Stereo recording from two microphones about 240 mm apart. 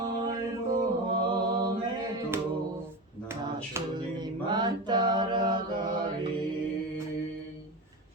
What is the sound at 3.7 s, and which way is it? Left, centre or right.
Mantra, centre.